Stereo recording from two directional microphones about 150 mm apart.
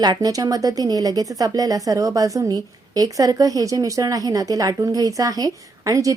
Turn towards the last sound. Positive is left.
turn(degrees=-20)  # may be behind; listen again after turning